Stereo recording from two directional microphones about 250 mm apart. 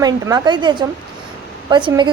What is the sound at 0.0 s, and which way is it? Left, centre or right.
A woman's voice, centre.